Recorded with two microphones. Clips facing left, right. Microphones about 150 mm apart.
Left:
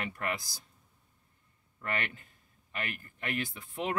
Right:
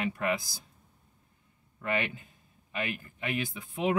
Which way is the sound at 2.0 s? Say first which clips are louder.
Right 4 dB; 10° right (ahead or behind).